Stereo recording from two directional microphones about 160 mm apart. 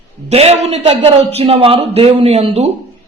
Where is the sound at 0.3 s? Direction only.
40° right (ahead or behind).